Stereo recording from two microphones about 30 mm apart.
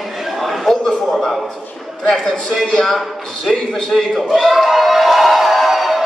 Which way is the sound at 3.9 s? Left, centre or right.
Centre.